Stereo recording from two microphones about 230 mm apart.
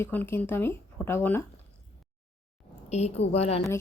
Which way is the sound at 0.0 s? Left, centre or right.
Centre.